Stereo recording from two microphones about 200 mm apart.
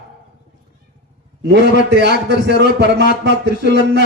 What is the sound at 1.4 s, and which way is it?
A man's voice, 55° right (ahead or behind).